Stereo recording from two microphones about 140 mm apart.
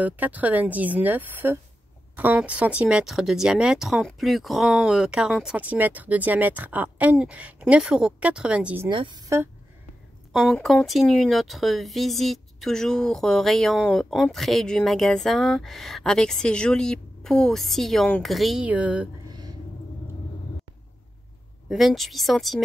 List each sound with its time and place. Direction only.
0.0 s speech: 10° right (ahead or behind)
8.9 s speech: 35° right (ahead or behind)
10.3 s speech: centre (ahead or behind)
21.6 s speech: centre (ahead or behind)